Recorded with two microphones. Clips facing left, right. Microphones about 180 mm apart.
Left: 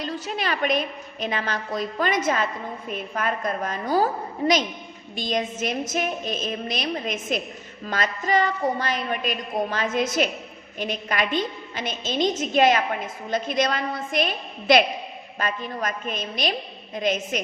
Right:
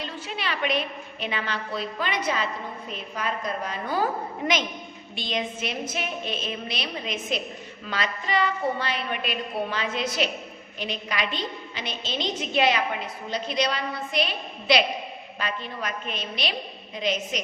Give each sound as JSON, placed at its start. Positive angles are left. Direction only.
{"t": 0.0, "sound": "a woman's voice", "side_deg": 45}
{"t": 5.1, "sound": "a woman's voice", "side_deg": 45}